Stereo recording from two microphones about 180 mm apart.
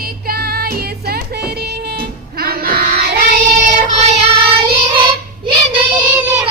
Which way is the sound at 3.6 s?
40° right (ahead or behind).